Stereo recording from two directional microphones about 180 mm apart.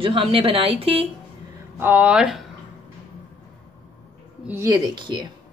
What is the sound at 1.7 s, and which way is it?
Speech, 10° right (ahead or behind).